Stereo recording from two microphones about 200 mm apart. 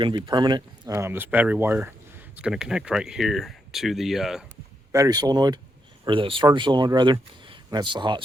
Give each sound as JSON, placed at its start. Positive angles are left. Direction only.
{"t": 0.0, "sound": "speech", "side_deg": -25}
{"t": 4.9, "sound": "speech", "side_deg": -15}